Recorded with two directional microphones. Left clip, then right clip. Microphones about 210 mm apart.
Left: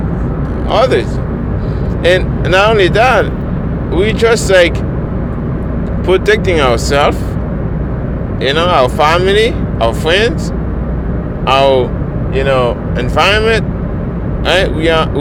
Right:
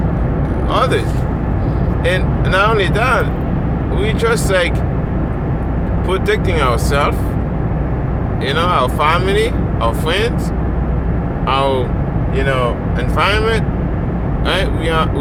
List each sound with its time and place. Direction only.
0.7 s speech: 25° left (ahead or behind)
2.0 s speech: 40° left (ahead or behind)
6.1 s speech: 35° left (ahead or behind)
8.4 s speech: 35° left (ahead or behind)
11.4 s speech: 35° left (ahead or behind)